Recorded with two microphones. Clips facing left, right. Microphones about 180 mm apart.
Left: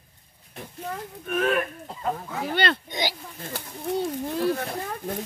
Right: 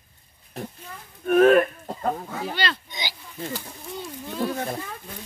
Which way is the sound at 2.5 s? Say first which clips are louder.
Left 4 dB; 55° left (ahead or behind).